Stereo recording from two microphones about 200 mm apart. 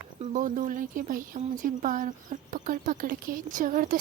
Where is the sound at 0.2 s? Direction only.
40° right (ahead or behind).